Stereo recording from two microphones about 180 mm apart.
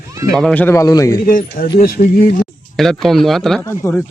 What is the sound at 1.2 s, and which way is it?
Speech, 50° left (ahead or behind).